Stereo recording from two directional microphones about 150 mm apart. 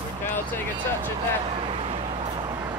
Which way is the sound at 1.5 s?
35° right (ahead or behind).